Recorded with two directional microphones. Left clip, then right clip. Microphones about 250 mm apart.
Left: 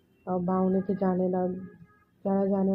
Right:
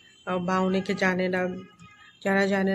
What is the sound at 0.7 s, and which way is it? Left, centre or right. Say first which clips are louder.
Speech: right 3 dB; centre.